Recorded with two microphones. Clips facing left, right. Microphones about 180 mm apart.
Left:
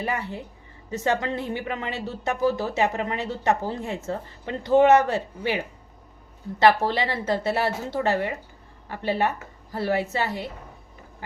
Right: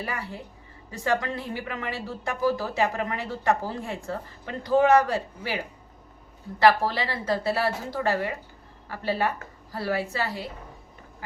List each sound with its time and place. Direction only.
0.0 s speech: 20° left (ahead or behind)